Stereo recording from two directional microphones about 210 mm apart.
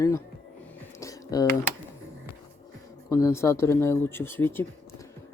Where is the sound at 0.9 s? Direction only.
15° left (ahead or behind).